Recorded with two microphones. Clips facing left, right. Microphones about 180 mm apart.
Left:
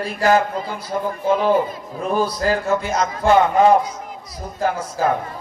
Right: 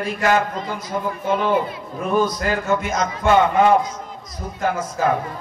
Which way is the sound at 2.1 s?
30° left (ahead or behind).